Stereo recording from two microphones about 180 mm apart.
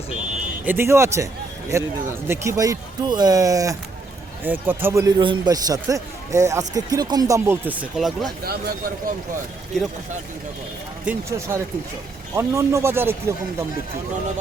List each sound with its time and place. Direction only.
0.6 s a man's voice: 10° right (ahead or behind)
8.4 s speech: 55° right (ahead or behind)
11.0 s a man's voice: 15° right (ahead or behind)